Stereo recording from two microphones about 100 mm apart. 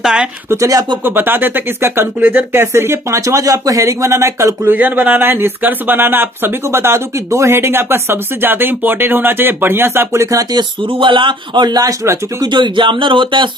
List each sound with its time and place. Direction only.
0.0 s speech: 5° right (ahead or behind)
0.5 s speech: 35° right (ahead or behind)
1.0 s speech: 20° right (ahead or behind)
10.6 s a man's voice: 55° right (ahead or behind); by 12.5 s 35° right (ahead or behind)
12.5 s speech: 50° right (ahead or behind)